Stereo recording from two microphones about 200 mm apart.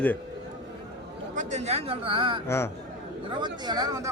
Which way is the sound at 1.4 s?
35° right (ahead or behind).